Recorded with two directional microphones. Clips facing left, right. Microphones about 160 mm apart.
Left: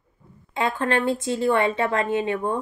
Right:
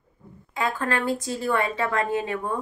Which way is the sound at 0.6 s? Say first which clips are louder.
Left 3 dB; 25° left (ahead or behind).